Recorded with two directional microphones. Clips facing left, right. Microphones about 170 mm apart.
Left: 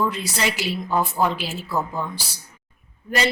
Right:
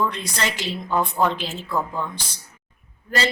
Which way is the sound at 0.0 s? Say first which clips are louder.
Left 1 dB; 5° left (ahead or behind).